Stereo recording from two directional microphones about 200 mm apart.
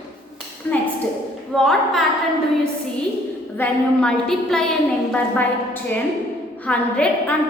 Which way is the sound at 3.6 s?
5° left (ahead or behind).